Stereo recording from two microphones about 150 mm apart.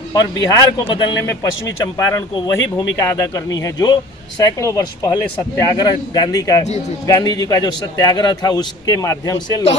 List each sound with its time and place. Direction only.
0.1 s a man's voice: 25° left (ahead or behind)